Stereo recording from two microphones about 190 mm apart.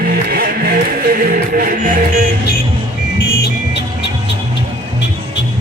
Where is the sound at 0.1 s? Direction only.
50° right (ahead or behind).